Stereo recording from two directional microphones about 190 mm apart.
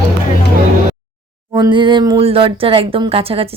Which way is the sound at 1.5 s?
25° right (ahead or behind).